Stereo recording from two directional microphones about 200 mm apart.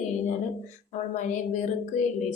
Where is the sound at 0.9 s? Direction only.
35° left (ahead or behind).